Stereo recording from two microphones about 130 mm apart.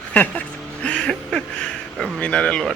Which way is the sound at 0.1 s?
10° left (ahead or behind).